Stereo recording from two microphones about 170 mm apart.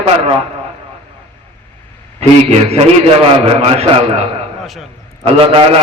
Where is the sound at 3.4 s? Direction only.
35° right (ahead or behind).